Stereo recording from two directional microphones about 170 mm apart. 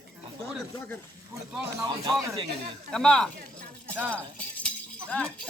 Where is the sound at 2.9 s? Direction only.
5° left (ahead or behind).